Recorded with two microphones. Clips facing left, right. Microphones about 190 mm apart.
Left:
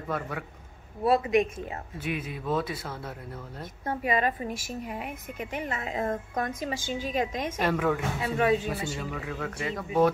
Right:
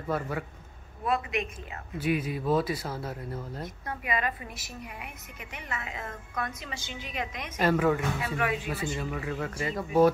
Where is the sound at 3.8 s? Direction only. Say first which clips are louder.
Left 6 dB; 35° left (ahead or behind).